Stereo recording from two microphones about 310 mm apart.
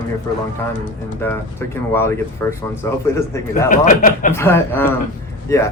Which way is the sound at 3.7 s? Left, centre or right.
Left.